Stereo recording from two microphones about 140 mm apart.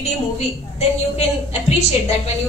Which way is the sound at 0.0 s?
50° left (ahead or behind).